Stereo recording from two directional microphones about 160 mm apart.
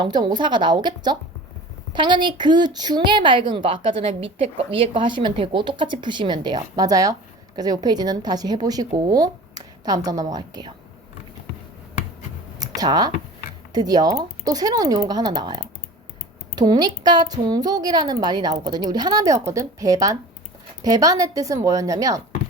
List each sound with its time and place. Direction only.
0.0 s a woman's voice: 25° right (ahead or behind)
12.5 s computer keyboard: 25° right (ahead or behind)
13.7 s a woman's voice: 25° right (ahead or behind)